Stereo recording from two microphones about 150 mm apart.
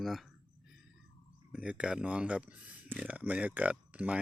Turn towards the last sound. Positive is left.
turn(degrees=-10)  # may be behind; listen again after turning